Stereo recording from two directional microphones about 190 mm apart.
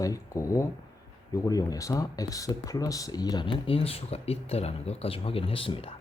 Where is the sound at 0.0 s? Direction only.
15° left (ahead or behind).